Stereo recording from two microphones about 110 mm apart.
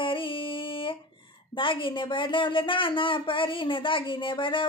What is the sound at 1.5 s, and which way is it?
Speech, 50° left (ahead or behind).